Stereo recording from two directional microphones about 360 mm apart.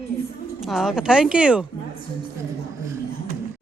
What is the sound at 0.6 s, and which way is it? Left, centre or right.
A woman's voice, centre.